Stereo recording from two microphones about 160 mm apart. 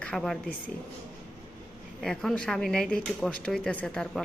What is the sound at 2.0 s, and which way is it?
Speech, centre (ahead or behind).